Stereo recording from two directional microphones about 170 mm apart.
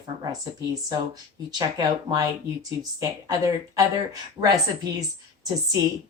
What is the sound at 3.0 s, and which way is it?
Speech, 20° right (ahead or behind).